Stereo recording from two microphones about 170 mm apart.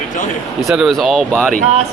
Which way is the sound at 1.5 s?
40° right (ahead or behind).